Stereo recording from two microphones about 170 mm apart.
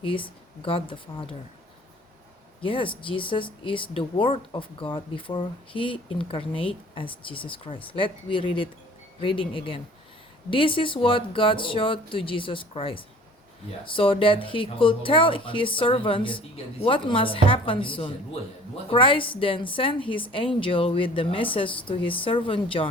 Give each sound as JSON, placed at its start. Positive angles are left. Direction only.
{"t": 0.0, "sound": "speech", "side_deg": 30}
{"t": 2.6, "sound": "speech", "side_deg": 30}